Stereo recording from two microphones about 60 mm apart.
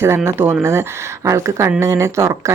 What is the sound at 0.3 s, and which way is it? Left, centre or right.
Speech, right.